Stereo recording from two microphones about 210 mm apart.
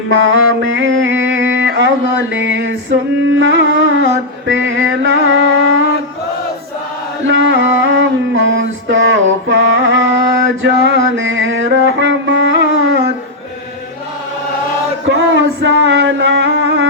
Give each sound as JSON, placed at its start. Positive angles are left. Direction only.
{"t": 0.1, "sound": "mantra", "side_deg": -60}
{"t": 3.3, "sound": "music", "side_deg": -65}
{"t": 7.3, "sound": "music", "side_deg": -60}
{"t": 15.1, "sound": "music", "side_deg": -60}